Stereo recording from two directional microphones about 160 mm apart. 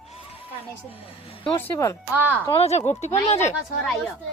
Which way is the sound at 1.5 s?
15° left (ahead or behind).